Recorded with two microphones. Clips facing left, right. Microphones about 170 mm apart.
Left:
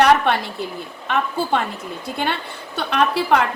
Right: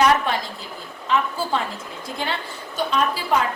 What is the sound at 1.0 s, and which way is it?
A woman's voice, 65° left (ahead or behind).